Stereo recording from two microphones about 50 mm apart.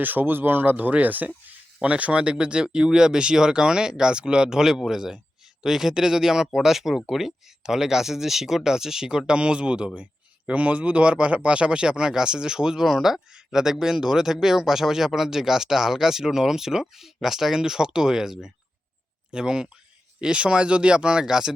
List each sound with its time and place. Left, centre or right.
0.0 s speech: right
1.8 s speech: right